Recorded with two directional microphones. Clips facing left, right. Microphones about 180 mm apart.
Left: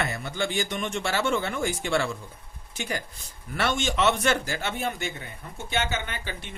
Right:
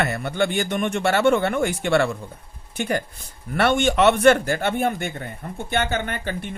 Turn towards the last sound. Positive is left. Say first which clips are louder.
# right 8 dB
turn(degrees=-50)  # may be behind; listen again after turning